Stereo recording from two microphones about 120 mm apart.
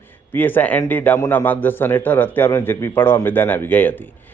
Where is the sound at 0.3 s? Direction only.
15° left (ahead or behind).